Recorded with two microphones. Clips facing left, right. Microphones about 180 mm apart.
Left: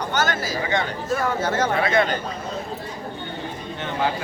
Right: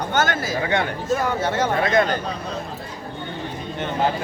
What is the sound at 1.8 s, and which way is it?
Speech, 45° right (ahead or behind).